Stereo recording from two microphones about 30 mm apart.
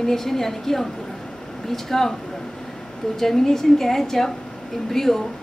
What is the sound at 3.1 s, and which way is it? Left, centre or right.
A woman's voice, centre.